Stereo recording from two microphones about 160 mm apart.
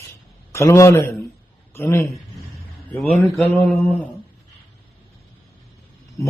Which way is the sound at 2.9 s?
5° left (ahead or behind).